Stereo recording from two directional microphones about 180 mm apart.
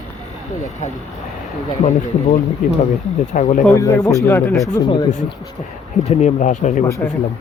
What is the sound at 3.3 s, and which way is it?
Speech, 45° left (ahead or behind).